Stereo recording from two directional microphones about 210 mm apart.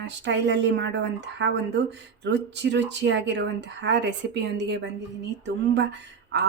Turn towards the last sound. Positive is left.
turn(degrees=-55)  # may be behind; listen again after turning